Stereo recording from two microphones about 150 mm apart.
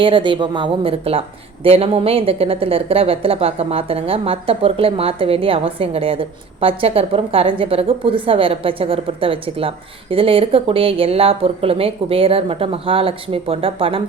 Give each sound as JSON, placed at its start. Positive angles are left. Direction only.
{"t": 0.0, "sound": "a woman's voice", "side_deg": -35}